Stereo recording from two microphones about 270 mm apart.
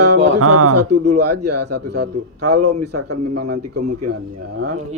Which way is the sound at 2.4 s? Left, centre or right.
Right.